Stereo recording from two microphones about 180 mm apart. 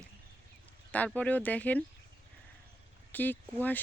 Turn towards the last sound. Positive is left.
turn(degrees=10)  # may be behind; listen again after turning